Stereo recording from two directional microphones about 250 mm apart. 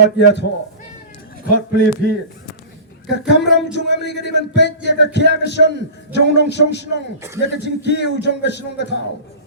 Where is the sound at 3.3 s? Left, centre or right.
Left.